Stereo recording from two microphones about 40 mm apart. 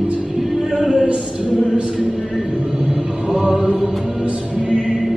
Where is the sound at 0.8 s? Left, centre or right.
Centre.